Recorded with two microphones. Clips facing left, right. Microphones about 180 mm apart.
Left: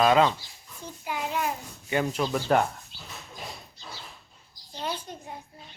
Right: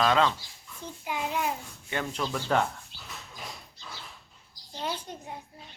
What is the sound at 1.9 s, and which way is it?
Speech, 10° left (ahead or behind).